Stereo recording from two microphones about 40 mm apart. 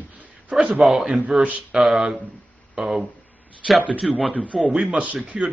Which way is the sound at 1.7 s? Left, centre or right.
Centre.